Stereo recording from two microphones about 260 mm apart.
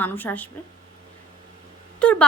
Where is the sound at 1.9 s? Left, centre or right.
Centre.